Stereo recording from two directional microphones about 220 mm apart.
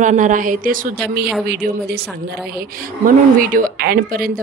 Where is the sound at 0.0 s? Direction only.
35° right (ahead or behind).